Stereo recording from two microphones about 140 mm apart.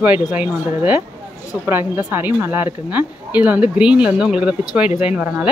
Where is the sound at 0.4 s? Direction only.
10° right (ahead or behind).